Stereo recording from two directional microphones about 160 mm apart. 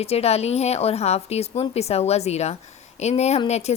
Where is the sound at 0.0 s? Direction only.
40° left (ahead or behind).